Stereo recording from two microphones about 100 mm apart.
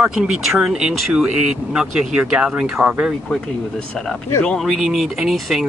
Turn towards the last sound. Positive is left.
turn(degrees=-5)  # may be behind; listen again after turning